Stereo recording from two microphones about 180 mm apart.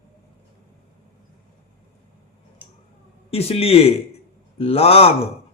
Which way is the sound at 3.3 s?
35° left (ahead or behind).